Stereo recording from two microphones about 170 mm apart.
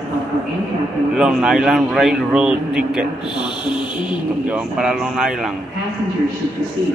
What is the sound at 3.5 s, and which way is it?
Music, 30° left (ahead or behind).